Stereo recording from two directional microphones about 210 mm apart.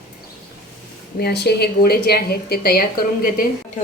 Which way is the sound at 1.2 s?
50° left (ahead or behind).